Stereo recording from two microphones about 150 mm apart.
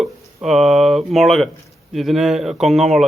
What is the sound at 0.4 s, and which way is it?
Speech, centre (ahead or behind).